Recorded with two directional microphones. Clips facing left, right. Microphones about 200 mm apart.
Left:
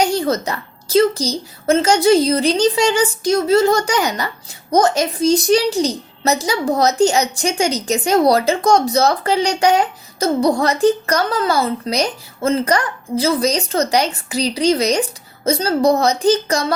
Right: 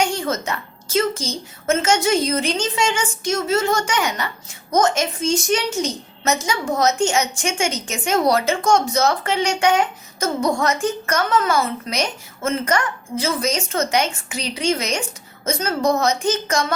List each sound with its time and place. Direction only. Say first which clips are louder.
0.0 s a woman's voice: left 5 dB; 35° left (ahead or behind)